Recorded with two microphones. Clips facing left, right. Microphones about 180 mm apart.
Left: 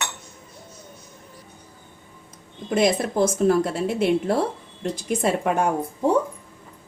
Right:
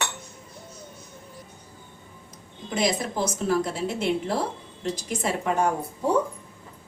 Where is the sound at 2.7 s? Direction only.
55° left (ahead or behind).